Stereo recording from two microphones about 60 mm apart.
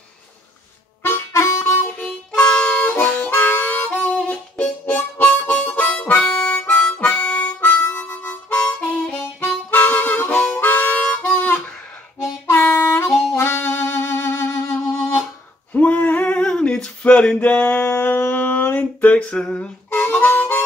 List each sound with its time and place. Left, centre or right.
1.3 s harmonica: left
2.0 s harmonica: centre
8.9 s harmonica: centre
9.7 s harmonica: left
11.3 s music: left
12.2 s harmonica: left
13.4 s music: left
15.7 s male singing: left
17.4 s a sound: left
19.9 s harmonica: left